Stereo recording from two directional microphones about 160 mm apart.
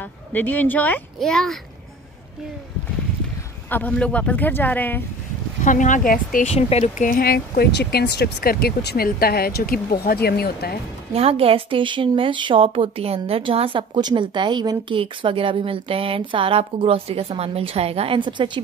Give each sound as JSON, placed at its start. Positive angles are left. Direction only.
{"t": 0.0, "sound": "speech", "side_deg": 10}
{"t": 3.7, "sound": "speech", "side_deg": 10}
{"t": 5.6, "sound": "speech", "side_deg": 55}
{"t": 6.4, "sound": "speech", "side_deg": 40}
{"t": 7.1, "sound": "speech", "side_deg": 70}
{"t": 11.1, "sound": "a woman's voice", "side_deg": -35}